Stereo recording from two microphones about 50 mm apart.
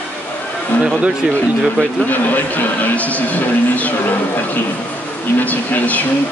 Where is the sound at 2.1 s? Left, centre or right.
Left.